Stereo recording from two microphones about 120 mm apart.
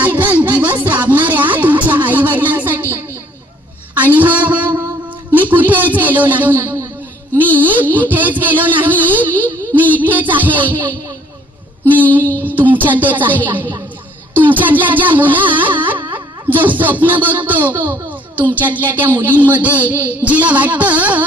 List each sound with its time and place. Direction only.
0.0 s music: 15° right (ahead or behind)
0.9 s a sound: 15° right (ahead or behind)
5.3 s speech: 15° right (ahead or behind)
12.5 s speech: 15° right (ahead or behind)